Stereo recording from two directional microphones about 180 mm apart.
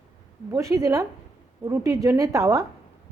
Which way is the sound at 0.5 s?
15° right (ahead or behind).